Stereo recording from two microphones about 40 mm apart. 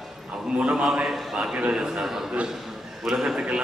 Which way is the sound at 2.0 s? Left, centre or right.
Centre.